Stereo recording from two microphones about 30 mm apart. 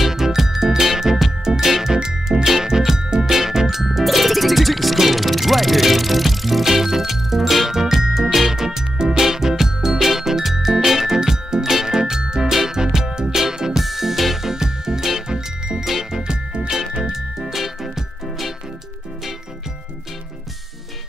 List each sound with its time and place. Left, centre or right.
0.0 s music: centre
3.3 s music: centre
13.8 s music: centre
14.5 s music: centre
17.1 s music: centre